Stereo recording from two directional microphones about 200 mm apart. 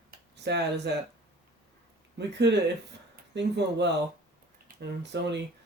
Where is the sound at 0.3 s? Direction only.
55° right (ahead or behind).